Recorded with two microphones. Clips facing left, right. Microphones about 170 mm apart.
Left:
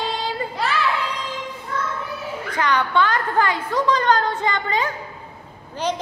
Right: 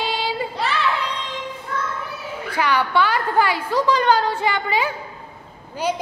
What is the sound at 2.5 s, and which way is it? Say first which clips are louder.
A woman's voice: right 1 dB; 10° right (ahead or behind).